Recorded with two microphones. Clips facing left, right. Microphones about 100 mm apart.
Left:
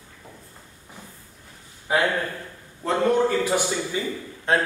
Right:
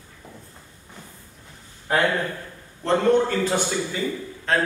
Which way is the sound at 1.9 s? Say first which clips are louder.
Right 1 dB; 5° left (ahead or behind).